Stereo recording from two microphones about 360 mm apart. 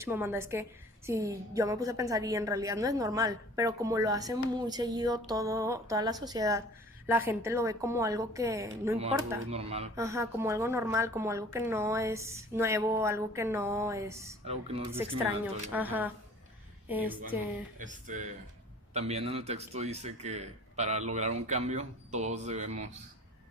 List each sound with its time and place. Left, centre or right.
0.0 s a woman's voice: centre
17.7 s a man's voice: right